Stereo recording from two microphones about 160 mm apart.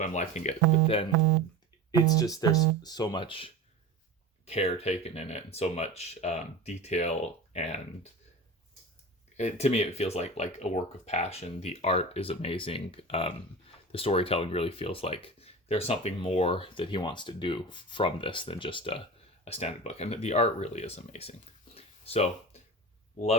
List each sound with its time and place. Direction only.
0.0 s speech: 50° left (ahead or behind)
1.9 s speech: 25° left (ahead or behind); by 7.8 s 45° left (ahead or behind)
9.4 s speech: 45° left (ahead or behind)
21.8 s a sound: 40° left (ahead or behind)
23.1 s speech: 45° left (ahead or behind)